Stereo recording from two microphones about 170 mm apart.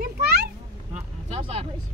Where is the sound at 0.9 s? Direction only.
40° right (ahead or behind).